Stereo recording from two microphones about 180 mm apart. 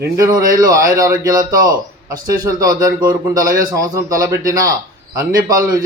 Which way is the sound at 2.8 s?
20° right (ahead or behind).